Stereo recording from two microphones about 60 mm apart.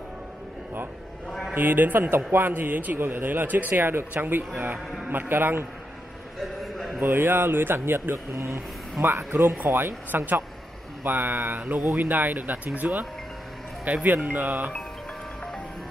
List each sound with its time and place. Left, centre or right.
1.5 s speech: right
6.4 s a sound: centre
7.0 s speech: right
9.0 s speech: right